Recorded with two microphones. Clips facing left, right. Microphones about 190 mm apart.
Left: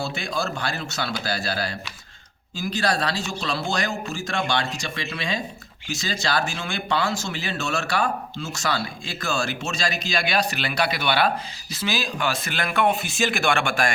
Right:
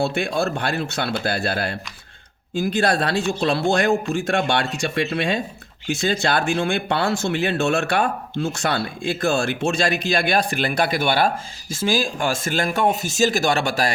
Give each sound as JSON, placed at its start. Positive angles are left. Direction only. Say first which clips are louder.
{"t": 0.0, "sound": "speech", "louder": "right 6 dB", "side_deg": -55}